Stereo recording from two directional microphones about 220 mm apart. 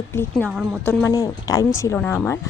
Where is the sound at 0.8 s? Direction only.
10° left (ahead or behind).